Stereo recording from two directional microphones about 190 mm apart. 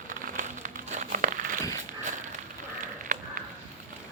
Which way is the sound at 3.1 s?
45° right (ahead or behind).